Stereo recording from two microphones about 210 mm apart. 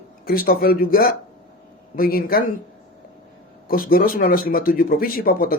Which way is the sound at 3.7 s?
45° left (ahead or behind).